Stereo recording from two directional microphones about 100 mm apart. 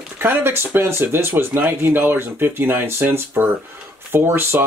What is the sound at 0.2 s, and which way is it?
Speech, 25° right (ahead or behind).